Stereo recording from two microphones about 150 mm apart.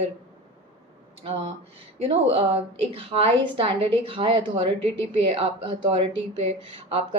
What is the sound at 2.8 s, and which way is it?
Speech, 40° right (ahead or behind).